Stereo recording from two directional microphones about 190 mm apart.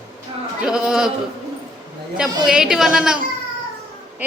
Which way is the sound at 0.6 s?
5° right (ahead or behind).